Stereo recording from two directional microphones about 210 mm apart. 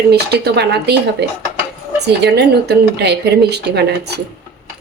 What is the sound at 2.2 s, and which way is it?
Speech, 50° right (ahead or behind).